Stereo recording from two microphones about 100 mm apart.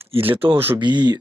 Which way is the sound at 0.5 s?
20° right (ahead or behind).